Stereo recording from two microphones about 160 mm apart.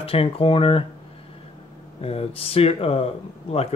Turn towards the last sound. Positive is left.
turn(degrees=40)  # may be behind; listen again after turning